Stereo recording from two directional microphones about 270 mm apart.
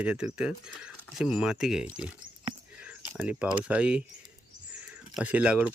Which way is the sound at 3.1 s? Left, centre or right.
Centre.